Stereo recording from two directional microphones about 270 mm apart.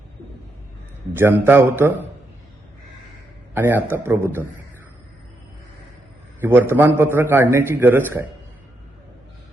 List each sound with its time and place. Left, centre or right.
1.1 s a man's voice: centre
3.5 s a man's voice: centre
6.4 s a man's voice: centre